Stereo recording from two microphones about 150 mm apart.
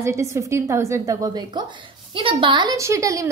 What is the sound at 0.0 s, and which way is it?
Speech, 20° right (ahead or behind).